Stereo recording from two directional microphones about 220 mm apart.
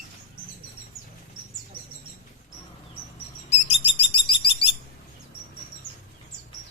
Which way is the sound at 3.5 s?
25° left (ahead or behind).